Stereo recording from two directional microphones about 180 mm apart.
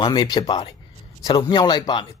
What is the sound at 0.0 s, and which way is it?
Speech, 25° left (ahead or behind).